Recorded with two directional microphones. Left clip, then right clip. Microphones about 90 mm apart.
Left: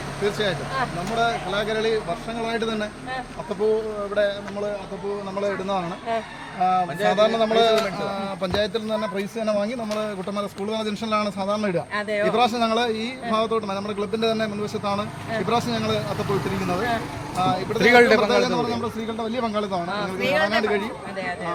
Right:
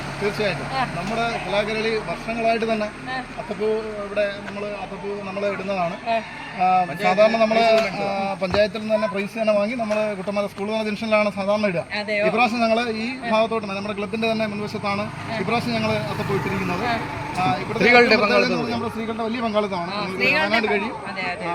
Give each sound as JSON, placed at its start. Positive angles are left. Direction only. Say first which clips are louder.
{"t": 0.3, "sound": "a man's voice", "louder": "right 1 dB", "side_deg": 35}
{"t": 6.6, "sound": "a man's voice", "louder": "right 2 dB", "side_deg": 35}
{"t": 11.9, "sound": "a man's voice", "louder": "right 1 dB", "side_deg": 20}